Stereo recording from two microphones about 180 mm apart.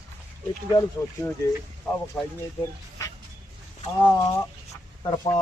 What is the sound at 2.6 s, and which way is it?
Speech, 15° left (ahead or behind).